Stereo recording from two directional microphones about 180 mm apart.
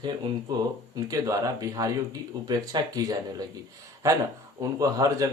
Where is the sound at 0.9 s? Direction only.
20° right (ahead or behind).